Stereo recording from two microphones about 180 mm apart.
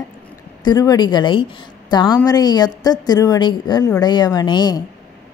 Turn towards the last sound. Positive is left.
turn(degrees=20)  # may be behind; listen again after turning